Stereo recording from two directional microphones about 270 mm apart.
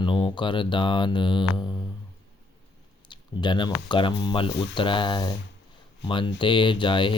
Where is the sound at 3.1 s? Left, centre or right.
Centre.